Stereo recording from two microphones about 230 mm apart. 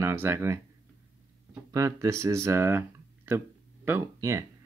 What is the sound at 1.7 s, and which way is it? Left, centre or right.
Speech, centre.